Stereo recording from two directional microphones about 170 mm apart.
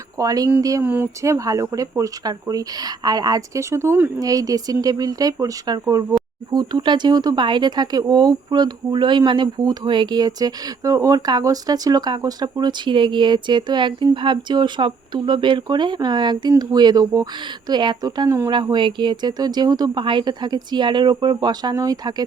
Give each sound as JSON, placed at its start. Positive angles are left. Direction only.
{"t": 0.2, "sound": "speech", "side_deg": -20}